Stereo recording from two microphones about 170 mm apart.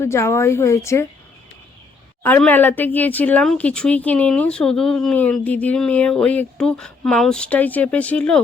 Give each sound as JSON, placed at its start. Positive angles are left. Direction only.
{"t": 0.0, "sound": "speech", "side_deg": 15}
{"t": 2.2, "sound": "speech", "side_deg": 10}